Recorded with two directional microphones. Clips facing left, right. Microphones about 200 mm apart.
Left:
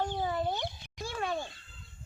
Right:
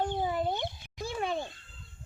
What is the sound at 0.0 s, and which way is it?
Cat, 20° right (ahead or behind).